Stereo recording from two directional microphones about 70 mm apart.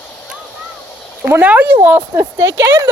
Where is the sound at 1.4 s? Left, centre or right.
Right.